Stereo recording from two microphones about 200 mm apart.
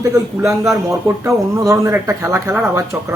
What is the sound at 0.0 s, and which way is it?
Speech, 15° right (ahead or behind).